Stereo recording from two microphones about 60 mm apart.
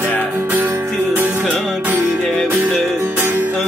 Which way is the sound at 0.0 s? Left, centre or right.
Right.